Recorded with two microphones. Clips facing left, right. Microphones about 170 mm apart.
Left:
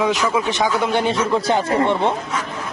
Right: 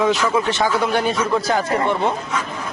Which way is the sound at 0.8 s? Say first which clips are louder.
Left 1 dB; 25° left (ahead or behind).